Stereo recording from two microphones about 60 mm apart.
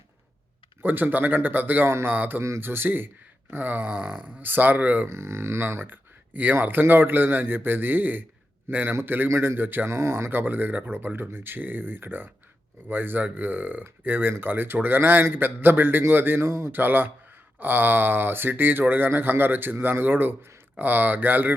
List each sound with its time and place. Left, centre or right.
0.8 s speech: right
1.9 s speech: right
2.1 s speech: right
5.0 s speech: right
16.7 s speech: right